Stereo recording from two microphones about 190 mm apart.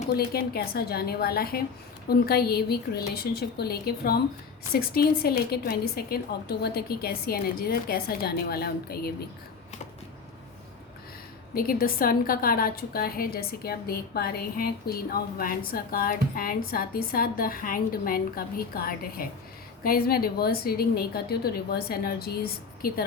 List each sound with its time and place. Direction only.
0.1 s a woman's voice: 55° left (ahead or behind)
11.5 s a woman's voice: 50° left (ahead or behind)